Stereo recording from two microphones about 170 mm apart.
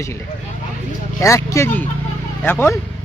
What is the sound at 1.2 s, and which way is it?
Speech, 15° left (ahead or behind).